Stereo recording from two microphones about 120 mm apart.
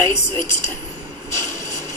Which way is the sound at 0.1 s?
25° left (ahead or behind).